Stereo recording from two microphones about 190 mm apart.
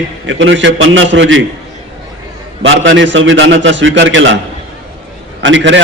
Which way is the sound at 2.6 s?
80° right.